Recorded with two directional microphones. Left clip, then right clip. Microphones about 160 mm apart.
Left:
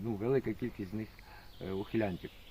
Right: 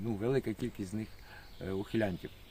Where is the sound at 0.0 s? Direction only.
30° right (ahead or behind).